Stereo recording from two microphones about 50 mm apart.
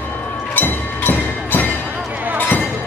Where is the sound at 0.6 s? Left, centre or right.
Left.